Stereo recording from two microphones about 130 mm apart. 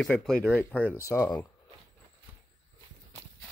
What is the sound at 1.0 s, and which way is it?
Speech, 25° left (ahead or behind).